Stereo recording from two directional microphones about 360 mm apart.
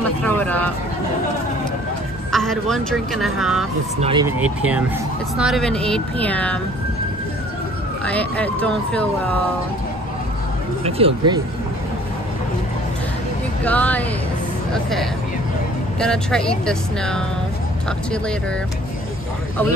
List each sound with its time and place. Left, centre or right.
0.2 s speech: centre
2.3 s speech: centre
4.0 s speech: centre
8.0 s speech: centre
10.8 s speech: centre
13.7 s speech: centre